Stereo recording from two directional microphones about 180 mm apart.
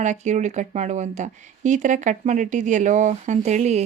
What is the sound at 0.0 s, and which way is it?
Speech, 40° right (ahead or behind).